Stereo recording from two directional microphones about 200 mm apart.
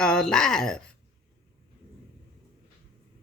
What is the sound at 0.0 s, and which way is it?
Speech, 5° left (ahead or behind).